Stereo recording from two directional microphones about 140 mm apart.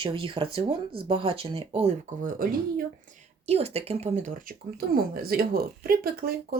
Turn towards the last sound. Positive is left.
turn(degrees=-90)